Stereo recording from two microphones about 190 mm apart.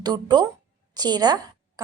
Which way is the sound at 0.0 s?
20° right (ahead or behind).